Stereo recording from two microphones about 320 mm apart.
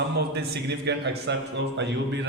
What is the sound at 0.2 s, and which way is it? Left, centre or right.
Speech, right.